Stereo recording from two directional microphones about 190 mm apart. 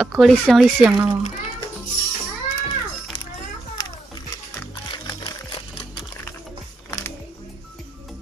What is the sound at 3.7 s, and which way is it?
Music, 20° left (ahead or behind).